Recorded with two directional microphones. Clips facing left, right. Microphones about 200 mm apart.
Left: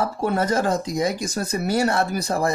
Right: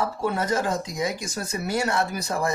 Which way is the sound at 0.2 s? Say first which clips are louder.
Left 4 dB; 45° left (ahead or behind).